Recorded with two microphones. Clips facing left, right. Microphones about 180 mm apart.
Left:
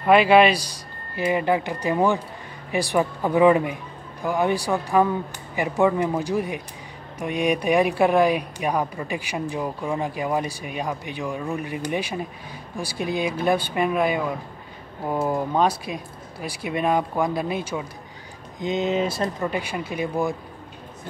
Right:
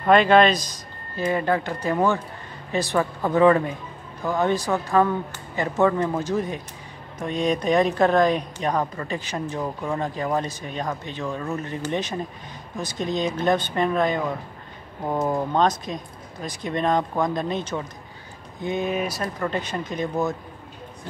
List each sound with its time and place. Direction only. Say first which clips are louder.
0.0 s a woman's voice: left 1 dB; 10° left (ahead or behind)
18.6 s a woman's voice: left 2 dB; 20° left (ahead or behind)